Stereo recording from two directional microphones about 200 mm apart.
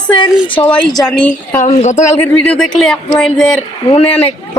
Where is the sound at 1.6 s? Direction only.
35° left (ahead or behind).